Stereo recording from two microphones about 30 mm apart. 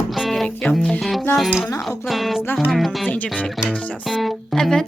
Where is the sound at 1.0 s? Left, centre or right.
Centre.